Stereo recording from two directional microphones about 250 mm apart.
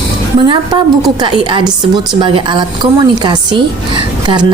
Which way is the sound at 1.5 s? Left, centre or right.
Centre.